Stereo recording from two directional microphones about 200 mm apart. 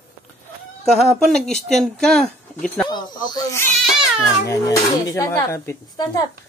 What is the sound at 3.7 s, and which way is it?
Cat, centre (ahead or behind).